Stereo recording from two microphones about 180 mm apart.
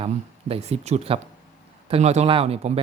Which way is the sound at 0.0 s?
30° right (ahead or behind).